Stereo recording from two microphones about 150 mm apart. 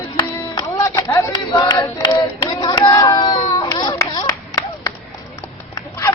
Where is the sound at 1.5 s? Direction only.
25° left (ahead or behind).